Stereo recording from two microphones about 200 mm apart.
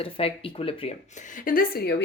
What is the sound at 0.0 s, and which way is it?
Speech, 30° left (ahead or behind).